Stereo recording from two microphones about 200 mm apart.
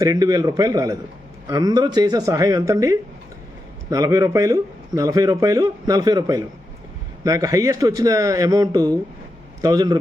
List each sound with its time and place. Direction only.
0.0 s speech: 20° right (ahead or behind)